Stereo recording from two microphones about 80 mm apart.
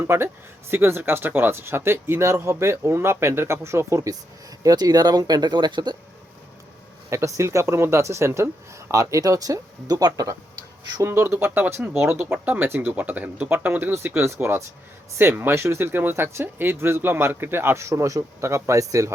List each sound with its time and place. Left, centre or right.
0.0 s speech: right
4.6 s speech: right
7.1 s speech: right
11.0 s speech: right